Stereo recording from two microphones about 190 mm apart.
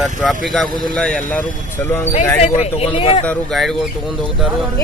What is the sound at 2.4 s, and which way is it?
Speech, 35° left (ahead or behind).